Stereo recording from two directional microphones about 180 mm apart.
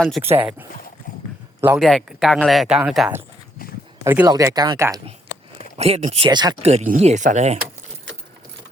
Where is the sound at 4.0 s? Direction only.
15° right (ahead or behind).